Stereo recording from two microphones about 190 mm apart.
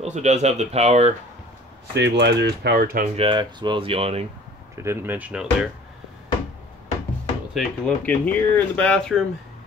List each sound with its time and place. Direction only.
0.0 s speech: 35° right (ahead or behind)
2.0 s speech: 65° right (ahead or behind)
3.2 s speech: 25° right (ahead or behind)
4.8 s speech: 10° right (ahead or behind)
7.5 s speech: 5° left (ahead or behind)